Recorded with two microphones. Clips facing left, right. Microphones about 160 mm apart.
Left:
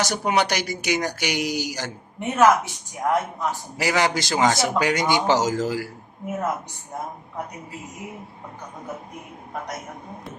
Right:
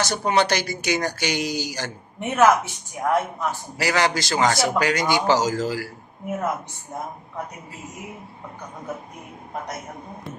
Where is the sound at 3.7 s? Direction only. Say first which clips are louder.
Even; 20° left (ahead or behind).